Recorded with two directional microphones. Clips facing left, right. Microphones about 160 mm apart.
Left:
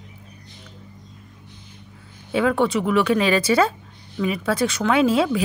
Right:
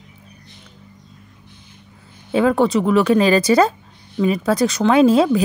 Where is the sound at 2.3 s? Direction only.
35° right (ahead or behind).